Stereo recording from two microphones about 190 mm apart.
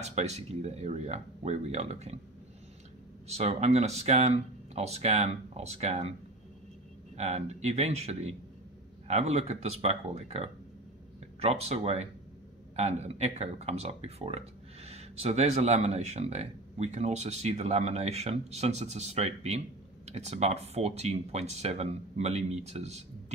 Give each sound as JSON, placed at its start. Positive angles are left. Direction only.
{"t": 0.0, "sound": "speech", "side_deg": -35}
{"t": 3.3, "sound": "speech", "side_deg": -35}
{"t": 7.2, "sound": "speech", "side_deg": -35}